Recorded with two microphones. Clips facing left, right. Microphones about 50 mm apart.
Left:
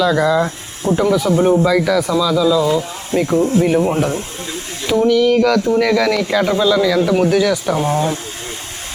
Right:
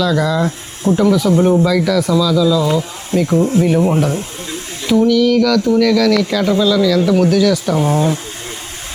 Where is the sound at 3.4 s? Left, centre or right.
Centre.